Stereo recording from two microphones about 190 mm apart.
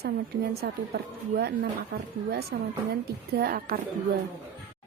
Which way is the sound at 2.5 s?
60° right (ahead or behind).